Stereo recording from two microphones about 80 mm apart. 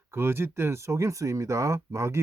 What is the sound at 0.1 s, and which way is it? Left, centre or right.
Speech, right.